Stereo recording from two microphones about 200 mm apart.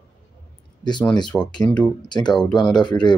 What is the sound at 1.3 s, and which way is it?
Speech, 5° left (ahead or behind).